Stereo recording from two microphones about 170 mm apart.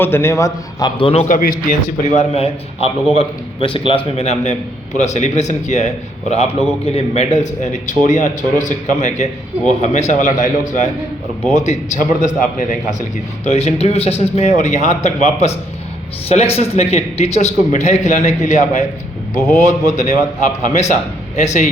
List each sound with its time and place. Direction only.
0.0 s a man's voice: 15° left (ahead or behind); by 21.7 s 45° left (ahead or behind)